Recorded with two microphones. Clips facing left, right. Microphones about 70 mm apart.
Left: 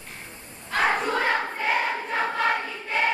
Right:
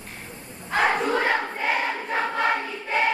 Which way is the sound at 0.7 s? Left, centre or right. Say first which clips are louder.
Right 2 dB; centre.